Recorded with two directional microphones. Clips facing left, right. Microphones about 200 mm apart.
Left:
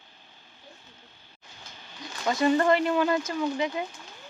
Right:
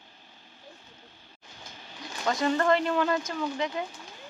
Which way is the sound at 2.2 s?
5° left (ahead or behind).